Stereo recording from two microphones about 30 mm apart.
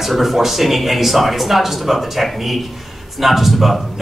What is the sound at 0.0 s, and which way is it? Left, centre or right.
A man's voice, centre.